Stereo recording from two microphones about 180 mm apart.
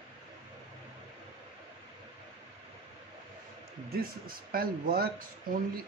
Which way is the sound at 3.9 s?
55° right (ahead or behind).